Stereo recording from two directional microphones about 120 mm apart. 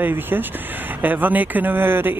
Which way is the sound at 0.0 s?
15° right (ahead or behind).